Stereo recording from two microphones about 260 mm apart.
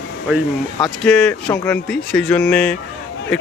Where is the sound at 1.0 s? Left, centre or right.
Centre.